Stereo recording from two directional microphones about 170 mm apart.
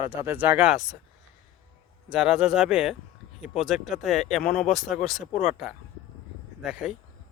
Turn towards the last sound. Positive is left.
turn(degrees=0)  # may be behind; listen again after turning